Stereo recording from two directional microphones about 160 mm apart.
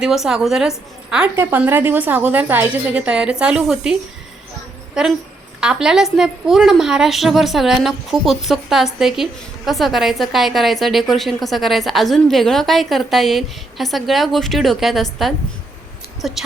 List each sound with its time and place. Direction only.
0.0 s a woman's voice: 5° right (ahead or behind)
5.0 s a woman's voice: 5° right (ahead or behind)
16.2 s a woman's voice: centre (ahead or behind)